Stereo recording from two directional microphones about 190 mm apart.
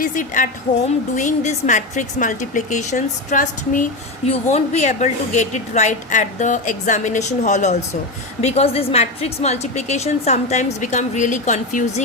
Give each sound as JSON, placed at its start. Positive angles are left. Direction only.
{"t": 0.0, "sound": "a woman's voice", "side_deg": 45}